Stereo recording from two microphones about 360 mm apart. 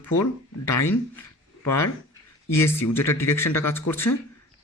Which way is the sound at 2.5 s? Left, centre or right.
Centre.